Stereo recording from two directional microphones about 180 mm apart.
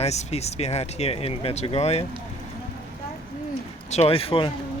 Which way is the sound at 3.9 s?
35° left (ahead or behind).